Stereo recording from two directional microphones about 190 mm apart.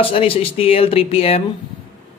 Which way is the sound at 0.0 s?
30° left (ahead or behind).